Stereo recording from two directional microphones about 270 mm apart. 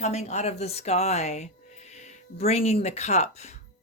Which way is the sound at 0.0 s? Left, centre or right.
Left.